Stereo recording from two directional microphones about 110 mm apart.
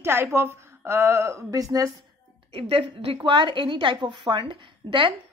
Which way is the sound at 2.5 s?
60° right (ahead or behind).